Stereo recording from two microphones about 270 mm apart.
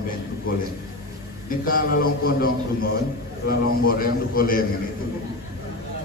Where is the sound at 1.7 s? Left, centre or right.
Left.